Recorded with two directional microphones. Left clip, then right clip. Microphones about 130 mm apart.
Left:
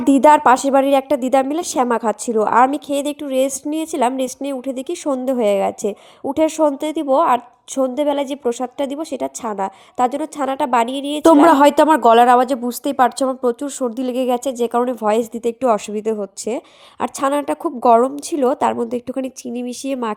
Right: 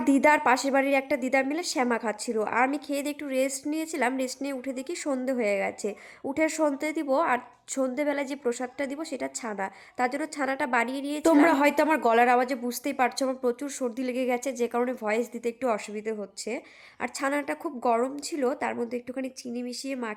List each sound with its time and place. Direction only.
0.0 s a woman's voice: 45° left (ahead or behind)